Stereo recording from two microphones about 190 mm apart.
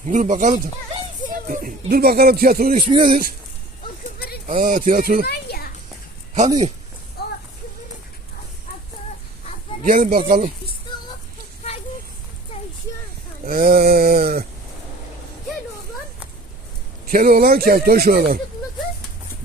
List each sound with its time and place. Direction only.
0.0 s speech: 40° right (ahead or behind)
2.9 s speech: 30° right (ahead or behind)
4.4 s speech: 45° right (ahead or behind)
5.2 s children playing: 55° left (ahead or behind)
7.2 s a sound: 55° left (ahead or behind)
9.8 s speech: 45° right (ahead or behind)
13.4 s speech: 50° right (ahead or behind)
17.1 s speech: 50° right (ahead or behind)